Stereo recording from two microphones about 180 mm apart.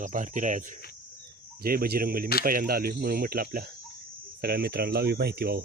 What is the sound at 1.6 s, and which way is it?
Speech, 55° right (ahead or behind).